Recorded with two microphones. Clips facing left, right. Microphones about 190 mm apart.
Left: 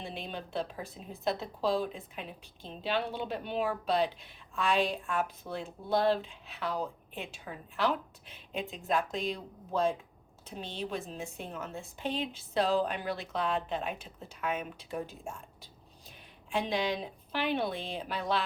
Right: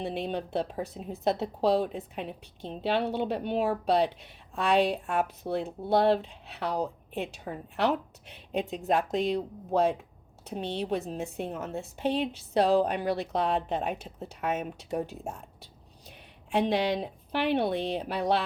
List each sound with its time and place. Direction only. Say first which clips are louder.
0.0 s speech: right 8 dB; 65° right (ahead or behind)
15.6 s a sound: right 3 dB; 70° right (ahead or behind)
18.1 s speech: right 4 dB; 65° right (ahead or behind)